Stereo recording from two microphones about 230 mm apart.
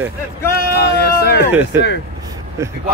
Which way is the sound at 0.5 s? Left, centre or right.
Left.